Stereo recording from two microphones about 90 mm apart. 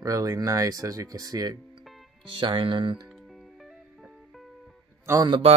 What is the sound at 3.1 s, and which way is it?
Music, centre (ahead or behind).